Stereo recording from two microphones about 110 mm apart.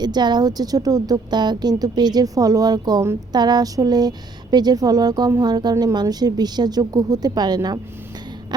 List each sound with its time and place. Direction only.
0.0 s a woman's voice: 40° right (ahead or behind)